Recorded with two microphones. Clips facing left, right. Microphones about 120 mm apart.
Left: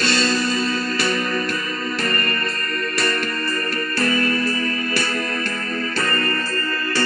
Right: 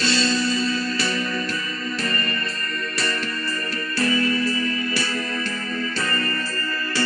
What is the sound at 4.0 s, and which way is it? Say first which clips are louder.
Music: even; 60° left (ahead or behind).